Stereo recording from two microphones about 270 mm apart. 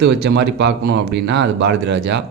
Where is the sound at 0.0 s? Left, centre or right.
Right.